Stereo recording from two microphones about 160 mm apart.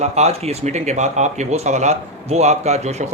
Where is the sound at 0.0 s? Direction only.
40° right (ahead or behind).